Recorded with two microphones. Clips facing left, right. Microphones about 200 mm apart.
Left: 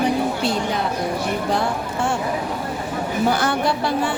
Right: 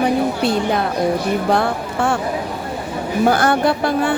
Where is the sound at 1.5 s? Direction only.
60° right (ahead or behind).